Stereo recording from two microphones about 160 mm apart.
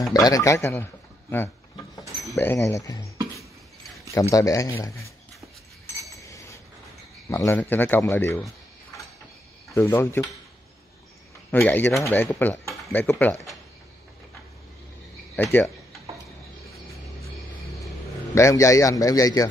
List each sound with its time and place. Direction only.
0.1 s a man's voice: 20° left (ahead or behind)
2.3 s a man's voice: 15° left (ahead or behind)
4.1 s a man's voice: 20° left (ahead or behind)
6.1 s chink: 20° left (ahead or behind)
7.2 s speech: 20° left (ahead or behind)
11.5 s speech: 10° left (ahead or behind)
15.3 s speech: 10° left (ahead or behind)
18.3 s a man's voice: 20° left (ahead or behind)